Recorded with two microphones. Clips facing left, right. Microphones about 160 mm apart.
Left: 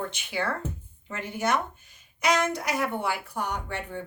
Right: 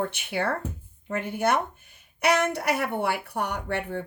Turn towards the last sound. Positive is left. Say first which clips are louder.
# right 4 dB
turn(degrees=-60)  # may be behind; listen again after turning